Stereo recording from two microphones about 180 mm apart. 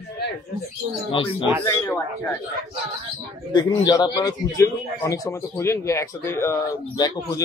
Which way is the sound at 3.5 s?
25° left (ahead or behind).